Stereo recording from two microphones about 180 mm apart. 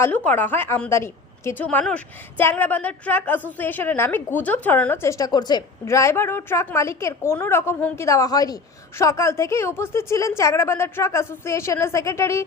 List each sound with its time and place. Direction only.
0.3 s a woman's voice: 10° left (ahead or behind)